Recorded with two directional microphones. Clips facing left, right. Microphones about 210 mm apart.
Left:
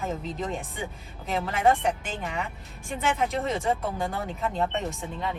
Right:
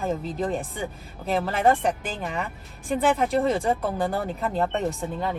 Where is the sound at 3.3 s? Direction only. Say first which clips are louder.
Right 5 dB; 30° right (ahead or behind).